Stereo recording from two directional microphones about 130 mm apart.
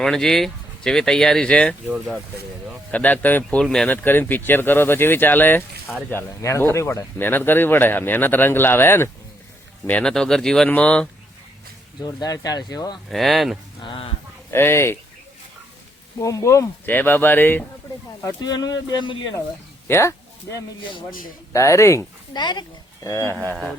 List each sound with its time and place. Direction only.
0.0 s speech: 5° left (ahead or behind)
2.9 s speech: 10° left (ahead or behind)
12.0 s speech: 30° left (ahead or behind)
13.1 s speech: centre (ahead or behind)
13.8 s speech: 45° left (ahead or behind)
14.5 s speech: 20° left (ahead or behind)
16.1 s speech: 25° left (ahead or behind)
18.2 s speech: 25° left (ahead or behind)
19.9 s speech: 20° left (ahead or behind)
22.4 s speech: 35° left (ahead or behind)
23.0 s speech: 20° left (ahead or behind)